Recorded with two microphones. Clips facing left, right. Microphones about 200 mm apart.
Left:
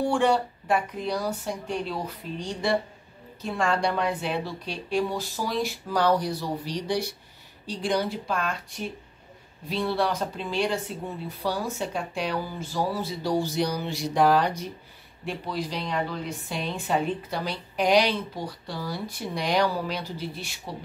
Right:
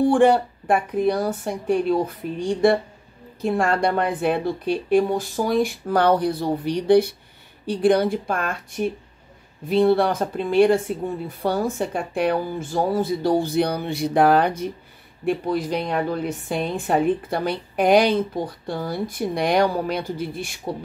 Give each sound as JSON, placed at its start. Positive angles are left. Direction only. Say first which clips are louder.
{"t": 0.1, "sound": "a woman's voice", "louder": "right 7 dB", "side_deg": -55}